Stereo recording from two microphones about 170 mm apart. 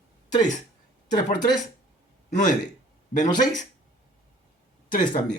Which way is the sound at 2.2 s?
45° left (ahead or behind).